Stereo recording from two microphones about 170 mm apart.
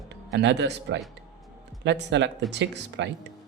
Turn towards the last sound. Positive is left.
turn(degrees=-90)